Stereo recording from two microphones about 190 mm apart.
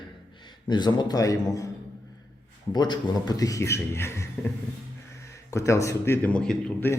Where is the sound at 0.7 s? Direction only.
25° left (ahead or behind).